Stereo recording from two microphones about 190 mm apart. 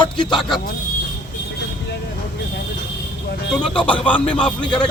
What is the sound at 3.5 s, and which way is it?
Speech, 5° left (ahead or behind).